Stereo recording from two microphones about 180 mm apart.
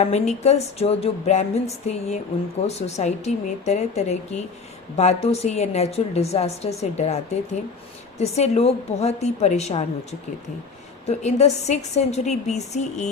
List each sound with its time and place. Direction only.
0.0 s speech: 35° left (ahead or behind)
8.2 s speech: 35° left (ahead or behind)